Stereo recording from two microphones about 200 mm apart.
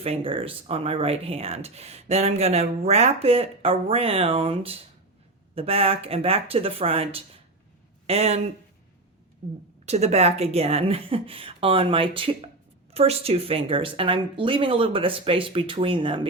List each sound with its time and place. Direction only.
0.0 s speech: 30° right (ahead or behind)
9.8 s speech: 30° right (ahead or behind)